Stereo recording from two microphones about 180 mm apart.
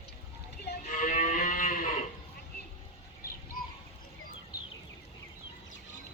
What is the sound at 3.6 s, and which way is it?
Bird, 50° left (ahead or behind).